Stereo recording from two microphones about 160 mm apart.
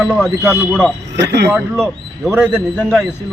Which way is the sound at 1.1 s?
90° right.